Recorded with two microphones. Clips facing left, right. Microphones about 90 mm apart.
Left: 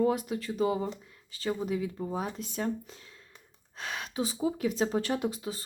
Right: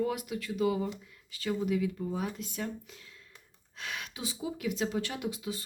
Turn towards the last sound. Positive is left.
turn(degrees=40)  # may be behind; listen again after turning